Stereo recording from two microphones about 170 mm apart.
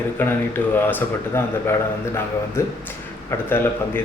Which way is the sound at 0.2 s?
10° left (ahead or behind).